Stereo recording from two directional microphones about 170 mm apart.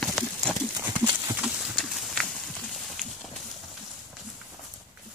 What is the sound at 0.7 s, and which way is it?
Clip-clop, 20° right (ahead or behind).